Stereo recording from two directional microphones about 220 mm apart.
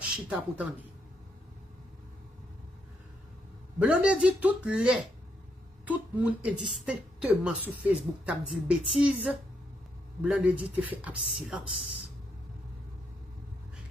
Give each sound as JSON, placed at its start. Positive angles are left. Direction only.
{"t": 0.0, "sound": "speech", "side_deg": -5}
{"t": 3.8, "sound": "speech", "side_deg": -5}